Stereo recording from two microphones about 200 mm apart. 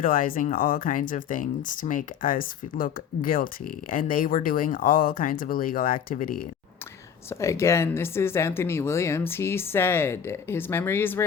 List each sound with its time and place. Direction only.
0.0 s speech: 45° left (ahead or behind)
7.3 s speech: 15° left (ahead or behind)